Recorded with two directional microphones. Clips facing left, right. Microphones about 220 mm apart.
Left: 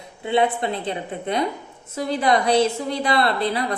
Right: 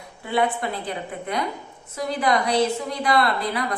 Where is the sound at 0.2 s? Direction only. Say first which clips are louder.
Left 3 dB; 25° left (ahead or behind).